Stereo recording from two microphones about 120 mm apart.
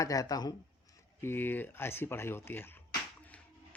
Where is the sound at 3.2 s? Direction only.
15° left (ahead or behind).